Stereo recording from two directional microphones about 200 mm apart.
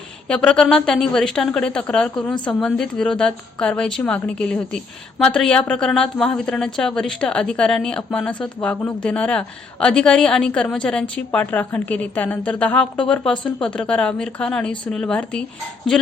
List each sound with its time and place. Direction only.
0.3 s speech: 5° left (ahead or behind)